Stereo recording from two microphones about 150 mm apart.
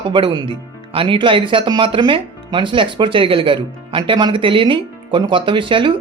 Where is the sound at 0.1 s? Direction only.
30° right (ahead or behind).